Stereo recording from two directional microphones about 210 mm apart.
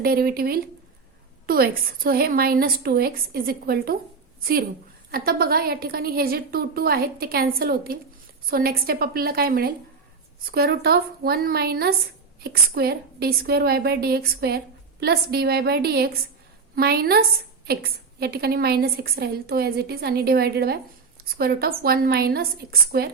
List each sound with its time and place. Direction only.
0.0 s a woman's voice: 45° right (ahead or behind)